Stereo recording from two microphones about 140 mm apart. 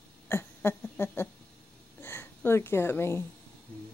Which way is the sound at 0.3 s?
15° left (ahead or behind).